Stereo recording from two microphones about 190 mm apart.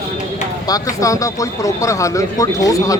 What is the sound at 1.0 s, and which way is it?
Speech, 15° left (ahead or behind).